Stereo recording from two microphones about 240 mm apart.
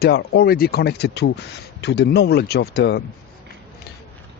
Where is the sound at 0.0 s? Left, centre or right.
Left.